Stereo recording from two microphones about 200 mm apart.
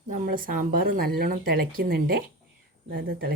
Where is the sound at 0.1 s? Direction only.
45° right (ahead or behind).